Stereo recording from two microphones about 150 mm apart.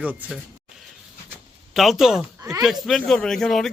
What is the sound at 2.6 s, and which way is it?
Speech, centre (ahead or behind).